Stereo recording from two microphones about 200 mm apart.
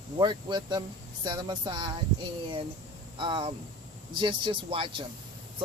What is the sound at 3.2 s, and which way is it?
Speech, 25° right (ahead or behind).